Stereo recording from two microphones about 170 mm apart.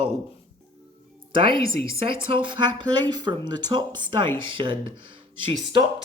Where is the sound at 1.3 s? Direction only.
30° right (ahead or behind).